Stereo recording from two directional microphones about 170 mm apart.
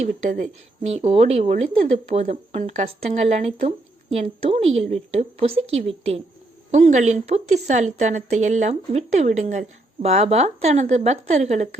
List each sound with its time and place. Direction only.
0.0 s a woman's voice: 45° right (ahead or behind)